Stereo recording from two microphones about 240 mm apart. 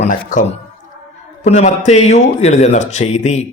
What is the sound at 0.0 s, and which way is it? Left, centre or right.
A man's voice, left.